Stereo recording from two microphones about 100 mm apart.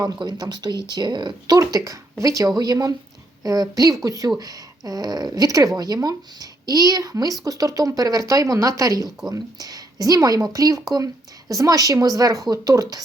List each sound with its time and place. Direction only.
0.0 s a woman's voice: 45° right (ahead or behind)